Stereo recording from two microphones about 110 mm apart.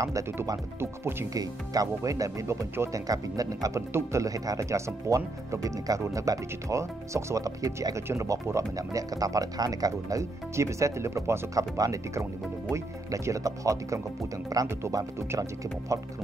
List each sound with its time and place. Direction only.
0.0 s speech: 30° right (ahead or behind)